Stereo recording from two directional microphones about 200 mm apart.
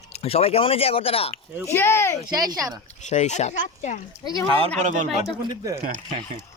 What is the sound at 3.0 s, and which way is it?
Speech, 35° left (ahead or behind).